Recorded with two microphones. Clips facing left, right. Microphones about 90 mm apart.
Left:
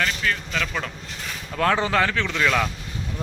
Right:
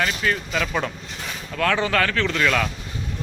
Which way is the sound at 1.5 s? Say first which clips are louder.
Even; 30° left (ahead or behind).